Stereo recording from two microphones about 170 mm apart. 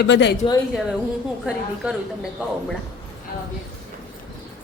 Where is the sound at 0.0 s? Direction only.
80° left.